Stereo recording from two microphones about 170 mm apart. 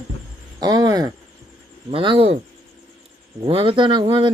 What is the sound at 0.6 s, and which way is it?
Speech, 25° right (ahead or behind).